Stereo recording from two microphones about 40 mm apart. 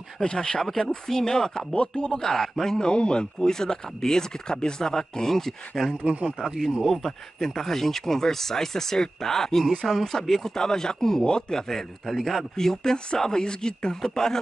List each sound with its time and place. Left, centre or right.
0.2 s speech: left
0.7 s speech: centre
2.8 s speech: left; by 5.9 s centre
6.0 s speech: right
6.8 s speech: centre